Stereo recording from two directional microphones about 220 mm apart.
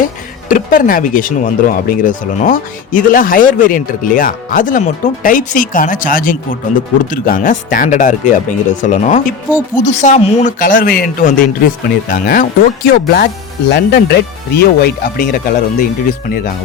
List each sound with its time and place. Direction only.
0.4 s speech: 40° left (ahead or behind)
9.5 s speech: 10° left (ahead or behind)
9.8 s speech: 35° left (ahead or behind)